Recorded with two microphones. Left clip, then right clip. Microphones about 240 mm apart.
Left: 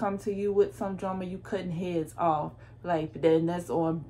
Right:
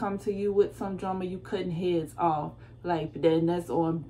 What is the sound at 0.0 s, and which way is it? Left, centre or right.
A woman's voice, centre.